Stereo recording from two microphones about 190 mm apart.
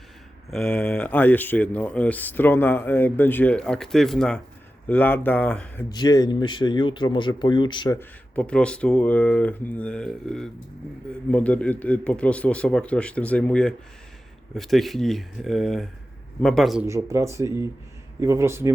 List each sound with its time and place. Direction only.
0.5 s speech: 5° left (ahead or behind)
5.9 s speech: 20° left (ahead or behind)
7.9 s speech: 5° left (ahead or behind)
16.8 s speech: 15° right (ahead or behind)